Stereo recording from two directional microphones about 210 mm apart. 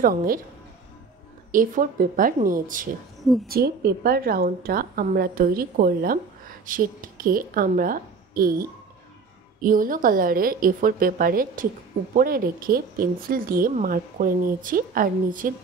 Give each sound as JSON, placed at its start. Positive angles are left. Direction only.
{"t": 0.0, "sound": "a woman's voice", "side_deg": -40}
{"t": 1.5, "sound": "a woman's voice", "side_deg": -40}